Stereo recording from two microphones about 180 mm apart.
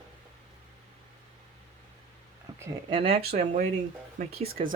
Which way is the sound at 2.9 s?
30° right (ahead or behind).